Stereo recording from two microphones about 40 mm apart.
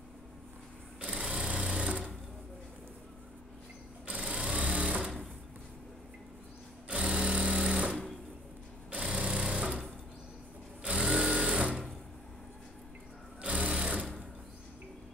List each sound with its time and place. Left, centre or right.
1.0 s sewing machine: right
4.1 s sewing machine: right
6.9 s sewing machine: right
9.1 s sewing machine: right
13.4 s sewing machine: right